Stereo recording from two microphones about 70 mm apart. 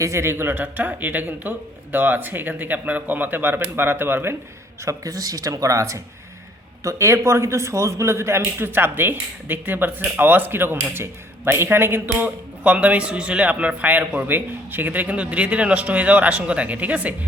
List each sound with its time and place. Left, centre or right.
0.0 s a man's voice: right
4.9 s a man's voice: right
12.6 s a man's voice: right